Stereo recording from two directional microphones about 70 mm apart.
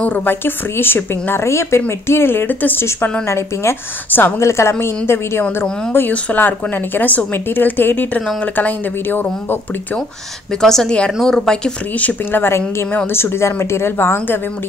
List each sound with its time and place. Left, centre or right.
0.0 s speech: left
10.6 s speech: centre
12.3 s speech: left